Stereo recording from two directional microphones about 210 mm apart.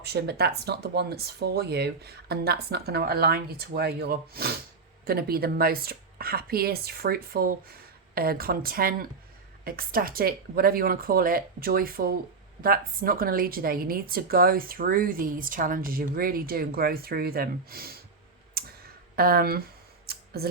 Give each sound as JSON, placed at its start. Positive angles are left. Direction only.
{"t": 0.0, "sound": "a woman's voice", "side_deg": -50}
{"t": 18.5, "sound": "clicking", "side_deg": -45}
{"t": 20.1, "sound": "a sound", "side_deg": -45}